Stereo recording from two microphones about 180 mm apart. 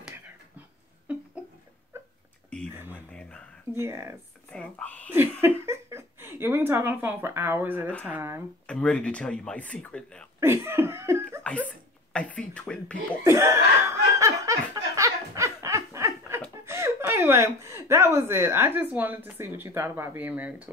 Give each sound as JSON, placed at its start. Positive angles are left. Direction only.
{"t": 1.1, "sound": "a sound", "side_deg": -10}
{"t": 2.9, "sound": "a sound", "side_deg": 5}
{"t": 3.8, "sound": "speech", "side_deg": -15}
{"t": 4.5, "sound": "speech", "side_deg": 5}
{"t": 5.1, "sound": "speech", "side_deg": -10}
{"t": 8.6, "sound": "speech", "side_deg": 5}
{"t": 10.4, "sound": "laughter", "side_deg": -10}
{"t": 12.1, "sound": "speech", "side_deg": 5}
{"t": 13.2, "sound": "laughter", "side_deg": -15}
{"t": 16.6, "sound": "a woman's voice", "side_deg": -15}